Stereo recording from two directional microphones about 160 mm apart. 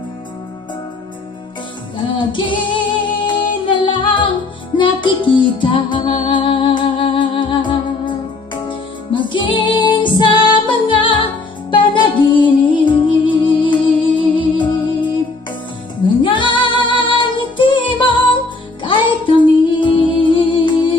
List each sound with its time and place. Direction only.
2.1 s music: 30° left (ahead or behind)
16.2 s music: 30° left (ahead or behind)